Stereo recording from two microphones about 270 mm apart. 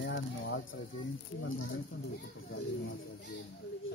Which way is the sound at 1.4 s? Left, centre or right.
Left.